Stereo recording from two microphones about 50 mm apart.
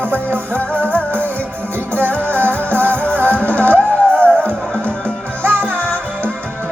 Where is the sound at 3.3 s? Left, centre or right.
Left.